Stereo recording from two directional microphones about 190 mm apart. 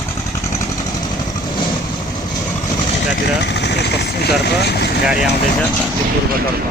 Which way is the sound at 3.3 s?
60° left (ahead or behind).